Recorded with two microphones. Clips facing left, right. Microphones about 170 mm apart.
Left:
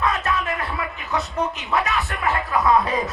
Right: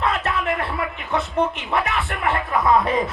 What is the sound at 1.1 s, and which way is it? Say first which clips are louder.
Speech: right 3 dB; 55° right (ahead or behind).